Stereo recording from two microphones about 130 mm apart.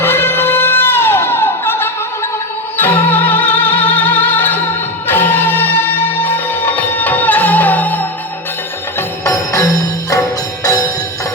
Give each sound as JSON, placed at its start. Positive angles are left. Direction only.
{"t": 0.0, "sound": "a sound", "side_deg": 20}
{"t": 2.7, "sound": "music", "side_deg": 15}
{"t": 9.0, "sound": "music", "side_deg": 25}